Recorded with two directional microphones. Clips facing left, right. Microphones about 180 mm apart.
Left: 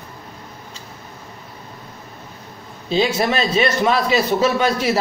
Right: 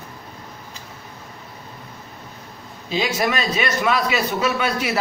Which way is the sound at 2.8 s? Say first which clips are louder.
Left 4 dB; 30° left (ahead or behind).